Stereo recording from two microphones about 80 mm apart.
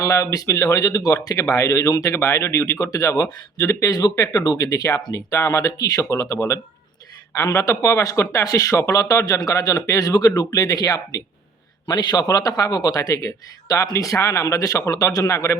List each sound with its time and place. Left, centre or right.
0.0 s a man's voice: left
11.9 s a man's voice: left